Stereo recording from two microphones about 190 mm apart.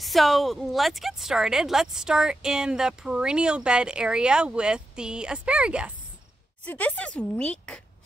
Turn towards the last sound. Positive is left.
turn(degrees=5)  # may be behind; listen again after turning